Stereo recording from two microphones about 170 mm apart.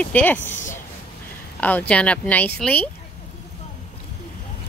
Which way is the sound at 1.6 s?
10° left (ahead or behind).